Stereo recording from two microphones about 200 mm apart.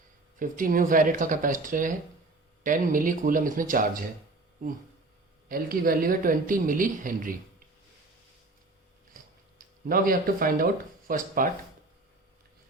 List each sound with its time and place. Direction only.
0.3 s speech: 40° right (ahead or behind)
5.5 s speech: 45° right (ahead or behind)
9.9 s speech: 45° right (ahead or behind)